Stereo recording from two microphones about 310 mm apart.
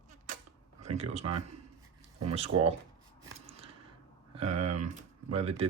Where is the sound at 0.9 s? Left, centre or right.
Centre.